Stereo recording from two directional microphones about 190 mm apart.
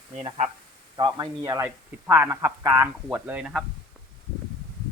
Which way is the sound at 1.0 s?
20° right (ahead or behind).